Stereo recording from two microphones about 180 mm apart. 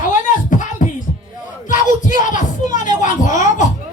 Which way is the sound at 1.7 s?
45° left (ahead or behind).